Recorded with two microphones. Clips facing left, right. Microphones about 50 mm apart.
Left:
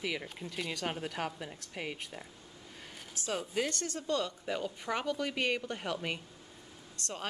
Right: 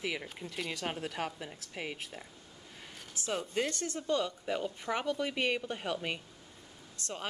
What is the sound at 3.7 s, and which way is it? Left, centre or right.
Speech, centre.